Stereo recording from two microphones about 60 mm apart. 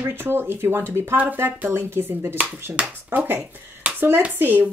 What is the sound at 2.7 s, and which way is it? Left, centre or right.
Speech, right.